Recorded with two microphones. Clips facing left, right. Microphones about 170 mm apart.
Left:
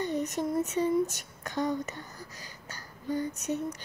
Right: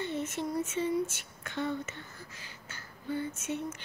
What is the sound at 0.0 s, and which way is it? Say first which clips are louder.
Speech: left 4 dB; 40° left (ahead or behind).